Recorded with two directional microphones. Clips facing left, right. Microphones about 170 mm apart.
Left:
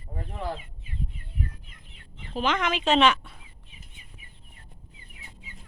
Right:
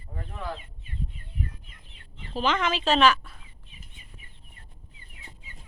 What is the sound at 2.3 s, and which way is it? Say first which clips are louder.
Speech: even; 10° left (ahead or behind).